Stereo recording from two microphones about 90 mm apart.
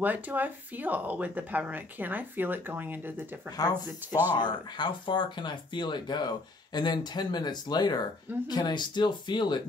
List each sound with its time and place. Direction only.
0.0 s speech: 20° right (ahead or behind)
3.5 s speech: 50° left (ahead or behind)
4.4 s speech: 60° left (ahead or behind)